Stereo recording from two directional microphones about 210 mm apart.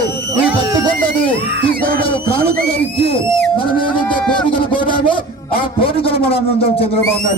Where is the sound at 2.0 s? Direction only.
25° left (ahead or behind).